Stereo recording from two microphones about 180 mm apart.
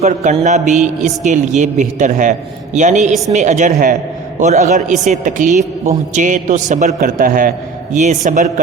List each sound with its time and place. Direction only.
0.0 s a man's voice: 40° right (ahead or behind)